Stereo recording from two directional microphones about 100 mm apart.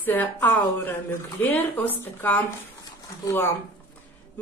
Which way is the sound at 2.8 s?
35° left (ahead or behind).